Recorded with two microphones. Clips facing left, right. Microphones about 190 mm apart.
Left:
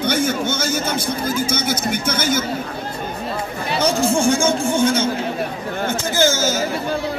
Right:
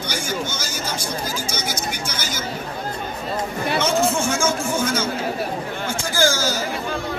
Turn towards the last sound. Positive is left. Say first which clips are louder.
# left 3 dB
turn(degrees=20)  # may be behind; listen again after turning